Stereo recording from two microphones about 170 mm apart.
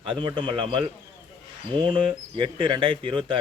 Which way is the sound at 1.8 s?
30° right (ahead or behind).